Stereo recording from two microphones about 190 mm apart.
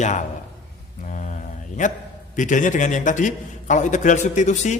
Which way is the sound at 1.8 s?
40° left (ahead or behind).